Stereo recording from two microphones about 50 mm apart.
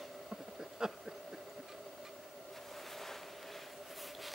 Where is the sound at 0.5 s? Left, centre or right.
Centre.